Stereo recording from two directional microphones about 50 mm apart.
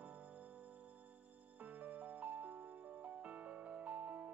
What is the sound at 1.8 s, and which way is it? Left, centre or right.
Music, right.